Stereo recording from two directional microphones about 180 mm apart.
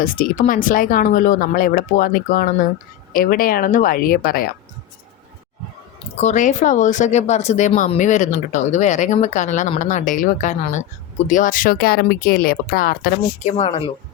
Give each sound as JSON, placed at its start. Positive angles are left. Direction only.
{"t": 0.0, "sound": "speech", "side_deg": 50}
{"t": 6.1, "sound": "speech", "side_deg": 45}